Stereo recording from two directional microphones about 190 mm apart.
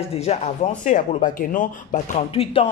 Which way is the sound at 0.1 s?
35° left (ahead or behind).